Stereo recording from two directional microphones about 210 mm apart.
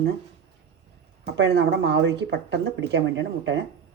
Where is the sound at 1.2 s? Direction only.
55° right (ahead or behind).